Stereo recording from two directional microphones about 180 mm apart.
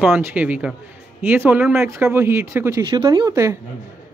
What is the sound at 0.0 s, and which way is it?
A woman's voice, 5° right (ahead or behind).